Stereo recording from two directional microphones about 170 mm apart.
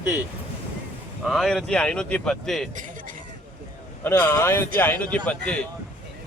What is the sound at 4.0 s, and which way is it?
A man's voice, 10° left (ahead or behind).